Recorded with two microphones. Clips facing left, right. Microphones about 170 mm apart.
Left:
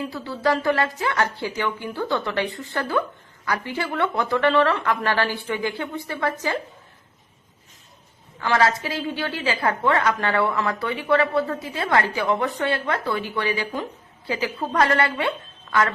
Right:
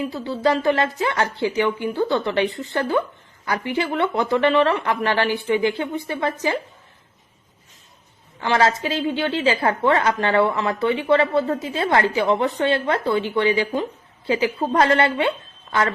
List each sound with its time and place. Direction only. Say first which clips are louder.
0.1 s a woman's voice: even; 20° right (ahead or behind)
8.4 s a woman's voice: right 2 dB; 25° right (ahead or behind)